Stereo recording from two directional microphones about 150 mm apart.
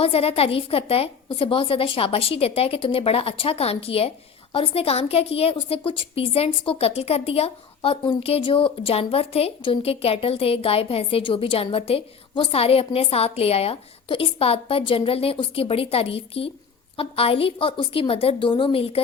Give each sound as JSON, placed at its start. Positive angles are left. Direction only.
{"t": 0.0, "sound": "a woman's voice", "side_deg": 40}